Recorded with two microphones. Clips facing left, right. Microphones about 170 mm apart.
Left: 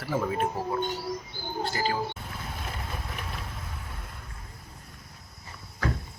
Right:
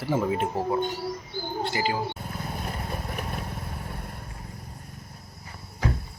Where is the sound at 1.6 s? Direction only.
20° right (ahead or behind).